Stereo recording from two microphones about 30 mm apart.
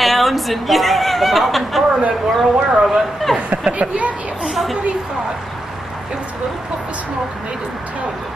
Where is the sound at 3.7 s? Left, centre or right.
Right.